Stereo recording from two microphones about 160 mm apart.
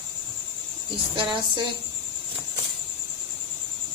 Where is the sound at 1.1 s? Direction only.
30° right (ahead or behind).